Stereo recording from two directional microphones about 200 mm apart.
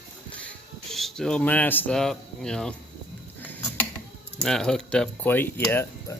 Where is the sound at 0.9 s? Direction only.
Centre (ahead or behind).